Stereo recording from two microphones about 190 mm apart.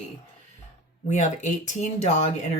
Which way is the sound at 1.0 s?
40° left (ahead or behind).